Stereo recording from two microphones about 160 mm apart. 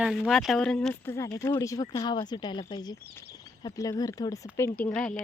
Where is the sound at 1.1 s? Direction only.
20° left (ahead or behind).